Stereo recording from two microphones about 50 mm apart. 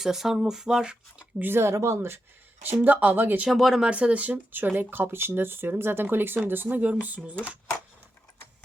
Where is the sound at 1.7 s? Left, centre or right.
Right.